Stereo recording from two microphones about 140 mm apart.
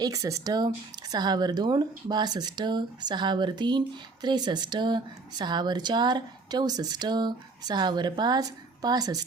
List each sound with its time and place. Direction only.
0.0 s speech: 25° right (ahead or behind)